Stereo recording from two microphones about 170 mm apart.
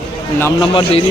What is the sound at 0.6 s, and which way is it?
Speech, 30° left (ahead or behind).